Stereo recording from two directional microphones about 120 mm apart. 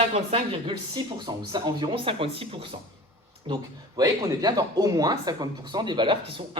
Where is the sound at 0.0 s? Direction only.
55° right (ahead or behind).